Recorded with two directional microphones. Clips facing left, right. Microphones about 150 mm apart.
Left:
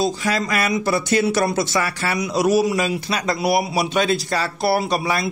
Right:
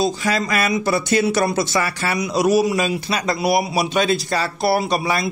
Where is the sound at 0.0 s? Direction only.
20° right (ahead or behind).